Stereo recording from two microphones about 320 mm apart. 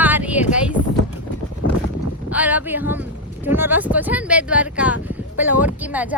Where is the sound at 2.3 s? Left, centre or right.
Centre.